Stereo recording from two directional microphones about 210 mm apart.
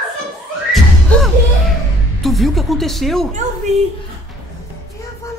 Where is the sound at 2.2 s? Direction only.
Centre (ahead or behind).